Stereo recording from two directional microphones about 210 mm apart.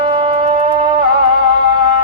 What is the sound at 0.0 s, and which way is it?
Shofar, 25° right (ahead or behind).